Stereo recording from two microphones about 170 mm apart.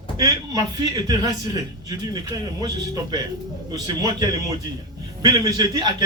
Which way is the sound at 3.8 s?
25° right (ahead or behind).